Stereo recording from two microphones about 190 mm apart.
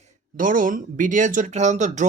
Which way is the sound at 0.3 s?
45° right (ahead or behind).